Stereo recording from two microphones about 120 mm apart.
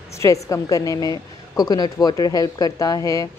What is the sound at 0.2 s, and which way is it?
A woman's voice, 25° left (ahead or behind).